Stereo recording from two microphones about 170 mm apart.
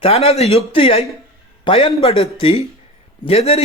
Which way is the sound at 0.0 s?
35° left (ahead or behind).